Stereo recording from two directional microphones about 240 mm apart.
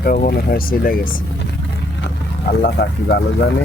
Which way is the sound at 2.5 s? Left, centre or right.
Left.